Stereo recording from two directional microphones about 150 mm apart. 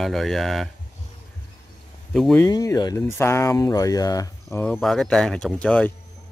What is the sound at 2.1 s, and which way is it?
Speech, 5° left (ahead or behind).